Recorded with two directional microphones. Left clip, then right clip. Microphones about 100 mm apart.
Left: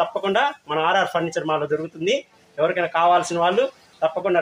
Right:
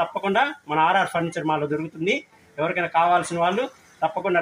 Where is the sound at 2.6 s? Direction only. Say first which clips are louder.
Left 2 dB; 50° left (ahead or behind).